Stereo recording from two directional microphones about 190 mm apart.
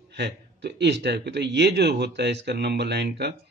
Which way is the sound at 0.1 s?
65° right (ahead or behind).